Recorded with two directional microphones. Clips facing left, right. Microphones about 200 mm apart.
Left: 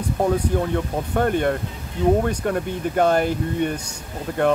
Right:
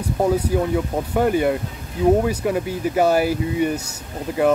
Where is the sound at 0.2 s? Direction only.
5° right (ahead or behind).